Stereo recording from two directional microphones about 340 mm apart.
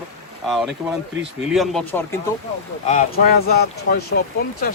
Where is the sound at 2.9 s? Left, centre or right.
Left.